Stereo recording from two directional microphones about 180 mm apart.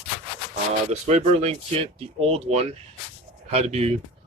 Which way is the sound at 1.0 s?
35° right (ahead or behind).